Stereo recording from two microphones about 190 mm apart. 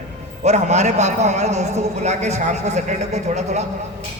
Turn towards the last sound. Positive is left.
turn(degrees=-35)  # may be behind; listen again after turning